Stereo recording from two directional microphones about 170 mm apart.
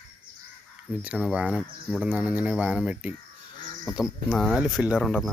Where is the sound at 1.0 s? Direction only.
5° right (ahead or behind).